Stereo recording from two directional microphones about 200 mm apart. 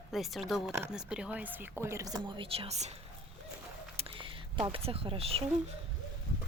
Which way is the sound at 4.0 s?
25° right (ahead or behind).